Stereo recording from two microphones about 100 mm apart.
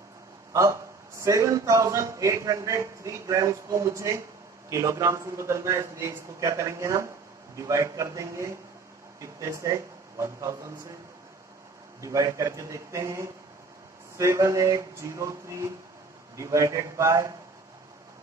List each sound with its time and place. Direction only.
0.5 s a man's voice: 30° right (ahead or behind)
12.0 s a man's voice: 30° right (ahead or behind)